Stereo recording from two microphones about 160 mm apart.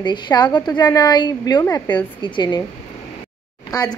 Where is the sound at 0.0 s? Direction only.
25° left (ahead or behind).